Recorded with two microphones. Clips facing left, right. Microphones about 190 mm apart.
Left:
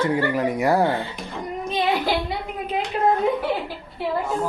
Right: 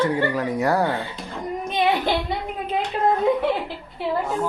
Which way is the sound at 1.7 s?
20° right (ahead or behind).